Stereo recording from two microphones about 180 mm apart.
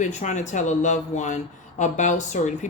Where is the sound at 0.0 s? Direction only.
40° left (ahead or behind).